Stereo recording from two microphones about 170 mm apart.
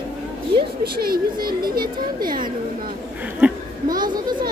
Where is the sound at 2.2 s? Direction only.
55° right (ahead or behind).